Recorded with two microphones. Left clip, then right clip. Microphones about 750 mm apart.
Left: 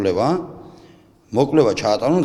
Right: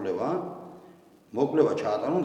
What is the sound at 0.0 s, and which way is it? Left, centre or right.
A man's voice, left.